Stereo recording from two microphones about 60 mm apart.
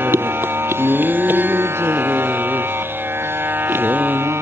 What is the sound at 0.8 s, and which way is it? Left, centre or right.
Music, right.